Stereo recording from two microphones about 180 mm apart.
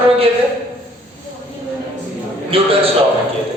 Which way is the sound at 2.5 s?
30° right (ahead or behind).